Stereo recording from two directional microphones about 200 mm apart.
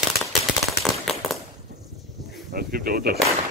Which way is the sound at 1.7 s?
55° right (ahead or behind).